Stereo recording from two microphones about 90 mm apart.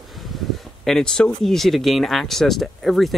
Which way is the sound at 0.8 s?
5° left (ahead or behind).